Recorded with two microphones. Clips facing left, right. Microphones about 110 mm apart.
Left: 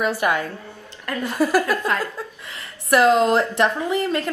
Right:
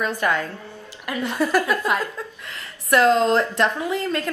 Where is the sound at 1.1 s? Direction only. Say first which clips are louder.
Even; 15° right (ahead or behind).